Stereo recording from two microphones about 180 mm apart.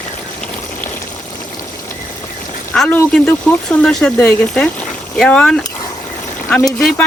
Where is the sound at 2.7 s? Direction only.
10° left (ahead or behind).